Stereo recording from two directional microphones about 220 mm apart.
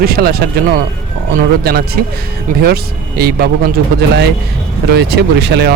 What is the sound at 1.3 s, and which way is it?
Speech, 45° right (ahead or behind).